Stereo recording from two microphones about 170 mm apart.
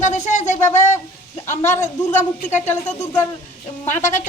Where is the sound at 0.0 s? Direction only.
45° left (ahead or behind).